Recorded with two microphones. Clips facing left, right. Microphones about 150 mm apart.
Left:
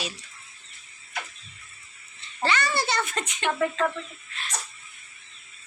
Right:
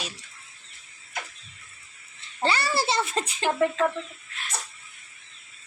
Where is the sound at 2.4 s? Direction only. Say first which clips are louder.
Right 1 dB; 30° right (ahead or behind).